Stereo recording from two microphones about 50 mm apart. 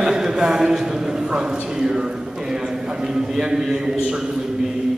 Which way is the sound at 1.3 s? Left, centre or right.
Centre.